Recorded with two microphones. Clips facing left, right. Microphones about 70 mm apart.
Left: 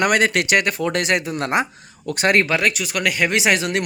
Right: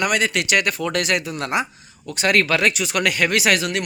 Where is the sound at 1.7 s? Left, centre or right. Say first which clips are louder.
Left 6 dB; left.